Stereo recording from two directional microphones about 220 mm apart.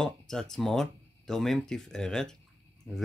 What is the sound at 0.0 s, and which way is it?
Speech, centre (ahead or behind).